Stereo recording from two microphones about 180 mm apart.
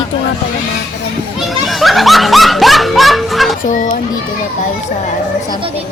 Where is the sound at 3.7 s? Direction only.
45° left (ahead or behind).